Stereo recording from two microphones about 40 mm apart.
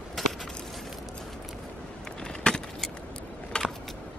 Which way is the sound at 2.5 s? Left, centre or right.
Left.